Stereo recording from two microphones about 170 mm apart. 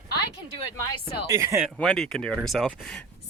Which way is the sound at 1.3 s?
15° right (ahead or behind).